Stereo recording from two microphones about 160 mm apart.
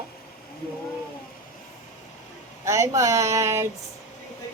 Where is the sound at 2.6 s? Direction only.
20° right (ahead or behind).